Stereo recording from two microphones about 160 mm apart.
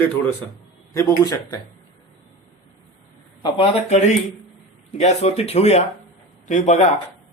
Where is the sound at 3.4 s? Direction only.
35° left (ahead or behind).